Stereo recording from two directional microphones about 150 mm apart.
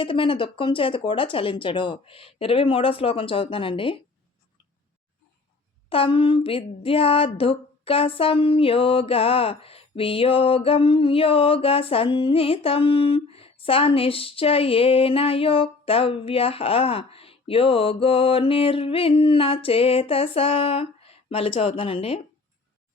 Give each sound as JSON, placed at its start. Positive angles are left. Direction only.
{"t": 0.0, "sound": "speech", "side_deg": 35}
{"t": 5.9, "sound": "speech", "side_deg": 35}